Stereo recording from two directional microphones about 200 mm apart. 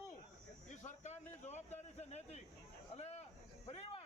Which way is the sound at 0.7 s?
35° left (ahead or behind).